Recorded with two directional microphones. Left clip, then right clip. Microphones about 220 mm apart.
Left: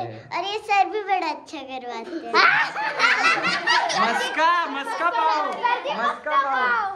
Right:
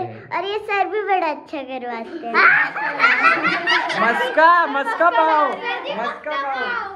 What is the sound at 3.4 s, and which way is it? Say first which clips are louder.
Speech: right 3 dB; 20° right (ahead or behind).